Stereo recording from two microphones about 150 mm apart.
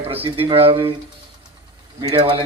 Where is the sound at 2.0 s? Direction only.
40° right (ahead or behind).